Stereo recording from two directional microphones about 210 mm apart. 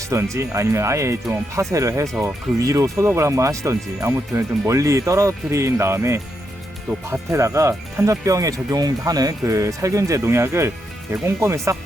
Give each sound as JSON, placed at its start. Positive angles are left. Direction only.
{"t": 0.1, "sound": "speech", "side_deg": -15}